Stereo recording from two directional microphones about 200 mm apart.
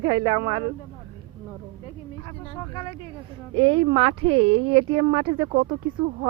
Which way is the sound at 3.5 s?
25° right (ahead or behind).